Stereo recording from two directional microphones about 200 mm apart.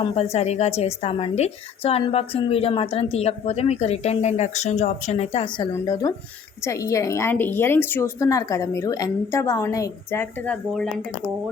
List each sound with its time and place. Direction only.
0.0 s a woman's voice: 30° left (ahead or behind)
5.7 s a woman's voice: 20° left (ahead or behind)